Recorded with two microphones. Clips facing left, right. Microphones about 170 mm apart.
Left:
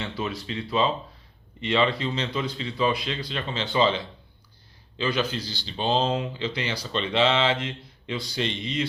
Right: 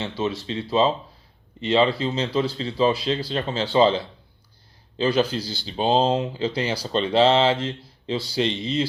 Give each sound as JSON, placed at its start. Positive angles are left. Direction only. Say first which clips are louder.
{"t": 0.0, "sound": "speech", "louder": "right 4 dB", "side_deg": -25}